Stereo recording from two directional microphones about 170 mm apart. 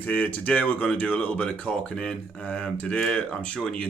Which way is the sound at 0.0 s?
10° left (ahead or behind).